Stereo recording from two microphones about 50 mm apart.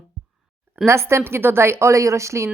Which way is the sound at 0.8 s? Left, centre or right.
Right.